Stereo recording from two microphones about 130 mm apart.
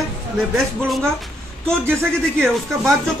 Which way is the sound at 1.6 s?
20° right (ahead or behind).